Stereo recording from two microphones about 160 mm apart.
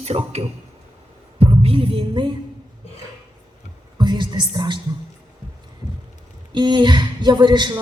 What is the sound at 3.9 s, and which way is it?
Music, 30° right (ahead or behind).